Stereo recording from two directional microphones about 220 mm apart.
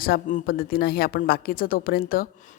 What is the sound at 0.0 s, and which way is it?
A woman's voice, 40° left (ahead or behind).